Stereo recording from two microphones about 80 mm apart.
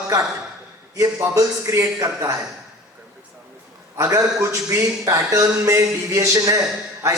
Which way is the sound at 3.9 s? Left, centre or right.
Right.